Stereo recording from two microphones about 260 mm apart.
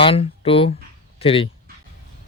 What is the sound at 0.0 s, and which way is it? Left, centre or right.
Speech, left.